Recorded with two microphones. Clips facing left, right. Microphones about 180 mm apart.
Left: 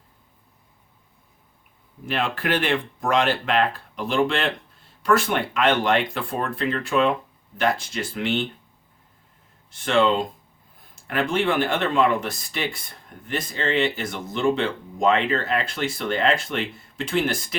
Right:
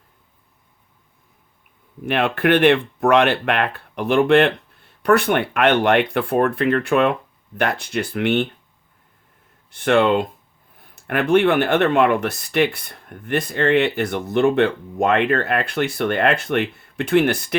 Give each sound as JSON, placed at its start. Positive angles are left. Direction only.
{"t": 2.0, "sound": "speech", "side_deg": -65}
{"t": 9.6, "sound": "speech", "side_deg": -60}